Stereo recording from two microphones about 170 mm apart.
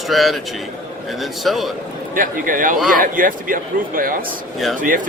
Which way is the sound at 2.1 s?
55° right (ahead or behind).